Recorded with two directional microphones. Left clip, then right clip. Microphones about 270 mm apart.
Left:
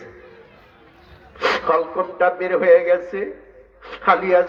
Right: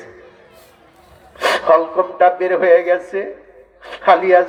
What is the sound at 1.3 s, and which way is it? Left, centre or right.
A man's voice, right.